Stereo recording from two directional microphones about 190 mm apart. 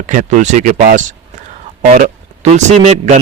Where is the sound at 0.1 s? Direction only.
40° right (ahead or behind).